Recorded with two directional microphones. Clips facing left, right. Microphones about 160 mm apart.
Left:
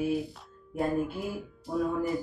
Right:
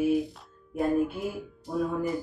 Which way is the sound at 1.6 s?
Centre (ahead or behind).